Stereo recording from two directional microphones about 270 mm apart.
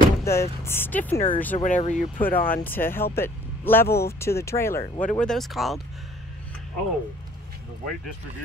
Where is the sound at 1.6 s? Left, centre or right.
Left.